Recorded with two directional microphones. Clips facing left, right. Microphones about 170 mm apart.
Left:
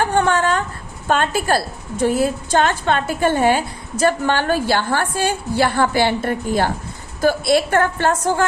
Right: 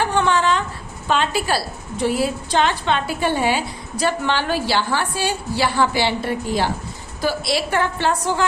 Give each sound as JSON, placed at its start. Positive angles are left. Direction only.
{"t": 0.0, "sound": "a woman's voice", "side_deg": 50}